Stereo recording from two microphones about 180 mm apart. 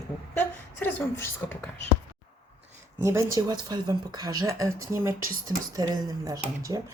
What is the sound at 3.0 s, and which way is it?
Speech, 15° right (ahead or behind).